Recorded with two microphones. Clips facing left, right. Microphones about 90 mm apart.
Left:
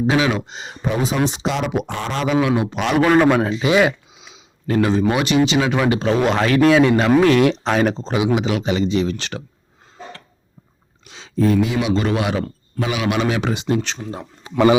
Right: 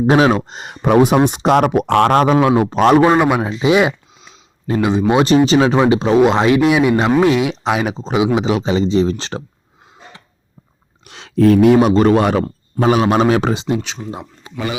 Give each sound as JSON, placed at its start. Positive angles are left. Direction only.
{"t": 0.1, "sound": "speech", "side_deg": -45}
{"t": 1.9, "sound": "a man's voice", "side_deg": -65}
{"t": 3.2, "sound": "speech", "side_deg": -15}
{"t": 5.1, "sound": "a man's voice", "side_deg": -35}
{"t": 8.2, "sound": "speech", "side_deg": -25}
{"t": 11.0, "sound": "a man's voice", "side_deg": -65}